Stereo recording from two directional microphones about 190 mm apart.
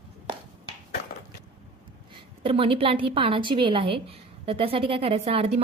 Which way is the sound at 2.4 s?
30° right (ahead or behind).